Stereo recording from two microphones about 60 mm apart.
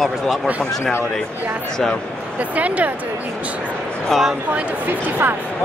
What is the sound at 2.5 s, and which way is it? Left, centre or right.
Speech, right.